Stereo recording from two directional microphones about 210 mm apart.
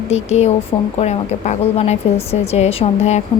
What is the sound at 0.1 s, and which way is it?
A woman's voice, 30° left (ahead or behind).